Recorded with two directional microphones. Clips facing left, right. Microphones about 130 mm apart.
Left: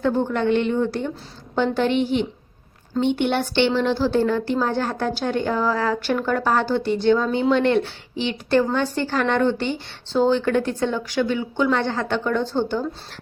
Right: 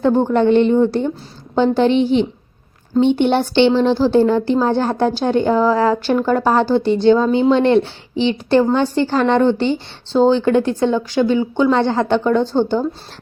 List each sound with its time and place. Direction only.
0.0 s speech: 30° right (ahead or behind)